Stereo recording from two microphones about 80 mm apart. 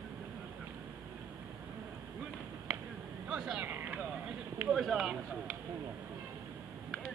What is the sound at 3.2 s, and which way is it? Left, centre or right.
Speech, centre.